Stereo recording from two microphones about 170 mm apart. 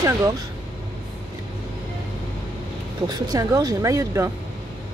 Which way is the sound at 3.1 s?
20° right (ahead or behind).